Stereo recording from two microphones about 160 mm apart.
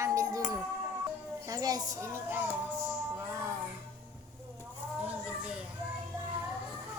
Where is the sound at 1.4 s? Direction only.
20° right (ahead or behind).